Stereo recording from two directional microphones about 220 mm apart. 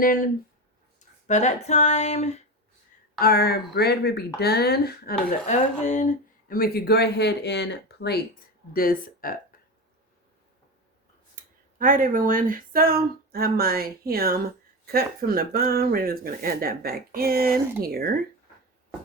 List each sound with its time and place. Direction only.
0.0 s speech: 40° left (ahead or behind)
0.9 s a sound: 30° left (ahead or behind)
3.2 s speech: 45° left (ahead or behind)
5.5 s speech: 35° left (ahead or behind)
11.3 s speech: 40° right (ahead or behind)